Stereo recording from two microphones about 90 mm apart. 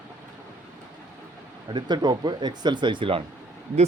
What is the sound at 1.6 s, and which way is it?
Speech, 55° right (ahead or behind).